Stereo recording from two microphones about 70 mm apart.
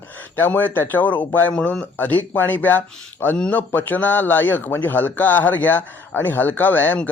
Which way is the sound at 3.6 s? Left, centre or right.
Left.